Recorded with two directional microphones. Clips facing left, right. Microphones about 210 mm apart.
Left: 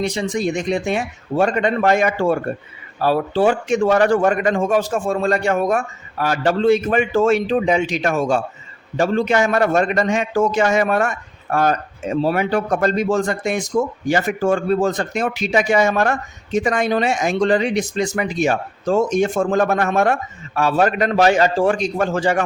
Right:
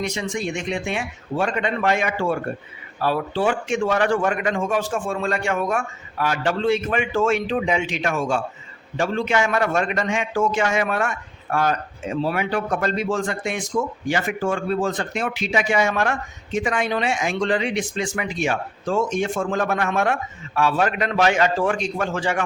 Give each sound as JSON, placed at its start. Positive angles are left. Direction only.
{"t": 0.0, "sound": "speech", "side_deg": 35}